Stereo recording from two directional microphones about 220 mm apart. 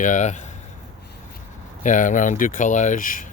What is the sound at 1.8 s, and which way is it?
Speech, 35° left (ahead or behind).